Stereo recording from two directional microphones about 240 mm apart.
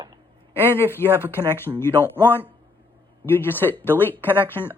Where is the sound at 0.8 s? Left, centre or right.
Centre.